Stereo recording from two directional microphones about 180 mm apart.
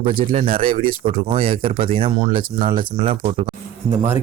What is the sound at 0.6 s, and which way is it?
Speech, 30° right (ahead or behind).